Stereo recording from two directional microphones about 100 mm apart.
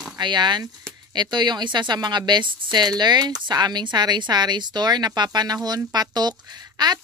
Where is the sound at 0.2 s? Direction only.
50° right (ahead or behind).